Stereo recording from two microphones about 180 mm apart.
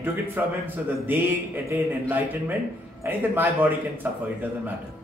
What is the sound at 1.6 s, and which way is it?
Speech, 15° right (ahead or behind).